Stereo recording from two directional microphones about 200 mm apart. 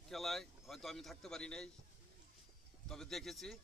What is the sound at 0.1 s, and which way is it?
Speech, centre (ahead or behind).